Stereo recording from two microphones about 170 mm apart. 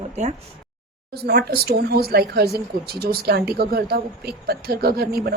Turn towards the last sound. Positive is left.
turn(degrees=-65)  # may be behind; listen again after turning